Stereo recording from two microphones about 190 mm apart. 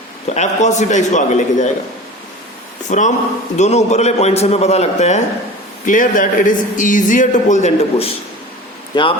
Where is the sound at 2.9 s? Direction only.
40° left (ahead or behind).